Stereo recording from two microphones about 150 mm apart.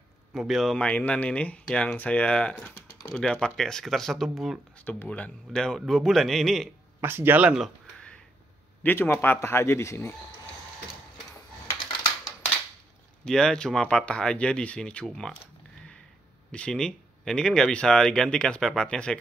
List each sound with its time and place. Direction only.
0.3 s speech: centre (ahead or behind)
4.8 s speech: 10° left (ahead or behind)
7.0 s speech: 15° right (ahead or behind)
8.8 s speech: 15° left (ahead or behind)
13.2 s speech: 5° left (ahead or behind)
16.5 s speech: 5° left (ahead or behind)